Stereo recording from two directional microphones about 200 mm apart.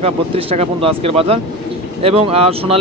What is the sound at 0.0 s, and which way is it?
A man's voice, 30° right (ahead or behind).